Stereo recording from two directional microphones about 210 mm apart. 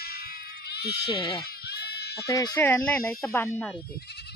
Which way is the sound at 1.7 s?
50° left (ahead or behind).